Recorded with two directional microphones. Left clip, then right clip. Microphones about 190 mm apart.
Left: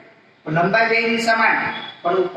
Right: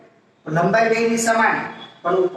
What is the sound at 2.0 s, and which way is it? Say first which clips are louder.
Speech: right 1 dB; 15° left (ahead or behind).